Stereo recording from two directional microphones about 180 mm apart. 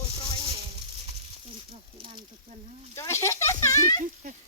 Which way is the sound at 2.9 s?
15° left (ahead or behind).